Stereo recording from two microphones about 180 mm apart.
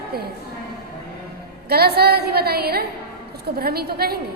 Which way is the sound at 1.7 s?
60° right (ahead or behind).